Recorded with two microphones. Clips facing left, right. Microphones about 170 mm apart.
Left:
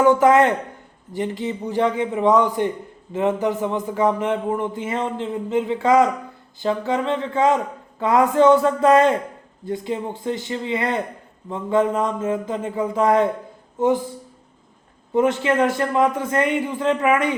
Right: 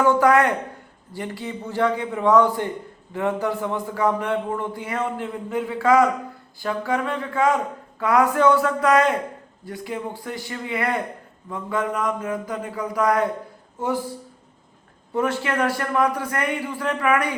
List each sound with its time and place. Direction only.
0.0 s a man's voice: 20° left (ahead or behind)
15.1 s a man's voice: 20° left (ahead or behind)